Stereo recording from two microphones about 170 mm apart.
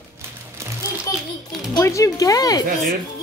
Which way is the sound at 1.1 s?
20° left (ahead or behind).